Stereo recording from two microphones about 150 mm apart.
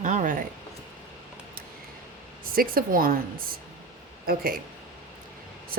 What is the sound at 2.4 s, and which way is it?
Speech, 75° right (ahead or behind).